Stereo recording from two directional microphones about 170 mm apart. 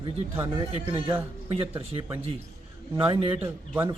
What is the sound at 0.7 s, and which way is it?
Speech, 35° right (ahead or behind).